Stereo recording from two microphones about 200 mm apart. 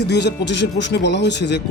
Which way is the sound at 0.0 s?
55° left (ahead or behind).